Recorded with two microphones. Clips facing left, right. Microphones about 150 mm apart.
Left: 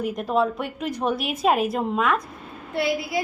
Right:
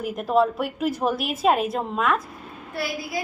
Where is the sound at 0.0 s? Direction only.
Centre (ahead or behind).